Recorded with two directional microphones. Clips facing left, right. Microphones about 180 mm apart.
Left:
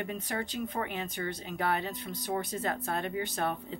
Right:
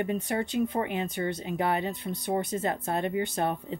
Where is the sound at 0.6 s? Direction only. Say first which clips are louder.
Right 6 dB; 25° right (ahead or behind).